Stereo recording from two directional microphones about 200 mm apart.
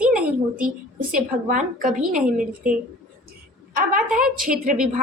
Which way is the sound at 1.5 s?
40° right (ahead or behind).